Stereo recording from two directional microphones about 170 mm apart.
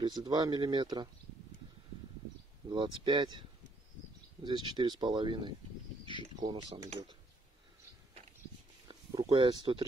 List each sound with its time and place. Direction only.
0.0 s speech: 25° right (ahead or behind)
2.7 s speech: 30° right (ahead or behind)
8.8 s speech: 30° right (ahead or behind)